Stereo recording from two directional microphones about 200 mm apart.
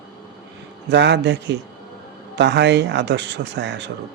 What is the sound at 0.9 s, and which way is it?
Speech, 60° right (ahead or behind).